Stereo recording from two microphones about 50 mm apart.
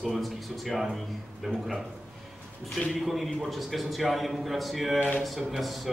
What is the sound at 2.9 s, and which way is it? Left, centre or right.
A man's voice, centre.